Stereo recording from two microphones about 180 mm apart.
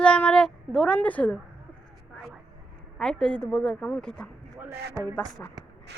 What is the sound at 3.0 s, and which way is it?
Speech, 5° left (ahead or behind).